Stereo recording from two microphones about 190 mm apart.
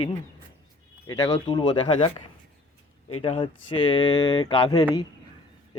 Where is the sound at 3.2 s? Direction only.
30° left (ahead or behind).